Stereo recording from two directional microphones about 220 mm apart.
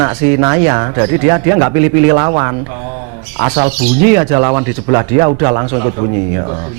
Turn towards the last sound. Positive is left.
turn(degrees=-25)  # may be behind; listen again after turning